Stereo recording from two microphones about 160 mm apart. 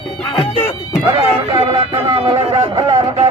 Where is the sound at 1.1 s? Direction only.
35° right (ahead or behind).